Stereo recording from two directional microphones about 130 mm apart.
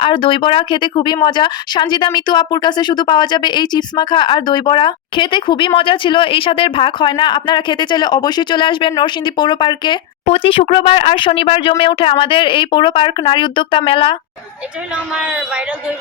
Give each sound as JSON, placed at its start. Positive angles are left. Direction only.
{"t": 0.0, "sound": "speech", "side_deg": 40}
{"t": 10.2, "sound": "speech", "side_deg": 45}
{"t": 15.1, "sound": "speech", "side_deg": -5}